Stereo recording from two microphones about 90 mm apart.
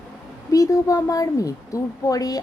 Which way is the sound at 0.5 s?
40° left (ahead or behind).